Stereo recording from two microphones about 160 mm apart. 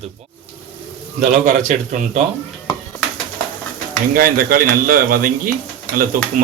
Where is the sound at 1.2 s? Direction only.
55° right (ahead or behind).